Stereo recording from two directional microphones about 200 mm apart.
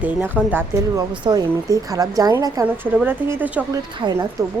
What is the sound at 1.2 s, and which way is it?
A woman's voice, 20° right (ahead or behind).